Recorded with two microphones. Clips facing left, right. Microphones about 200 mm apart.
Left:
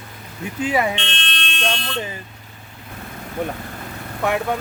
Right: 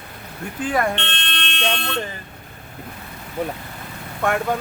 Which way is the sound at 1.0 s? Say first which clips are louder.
Even; 60° right (ahead or behind).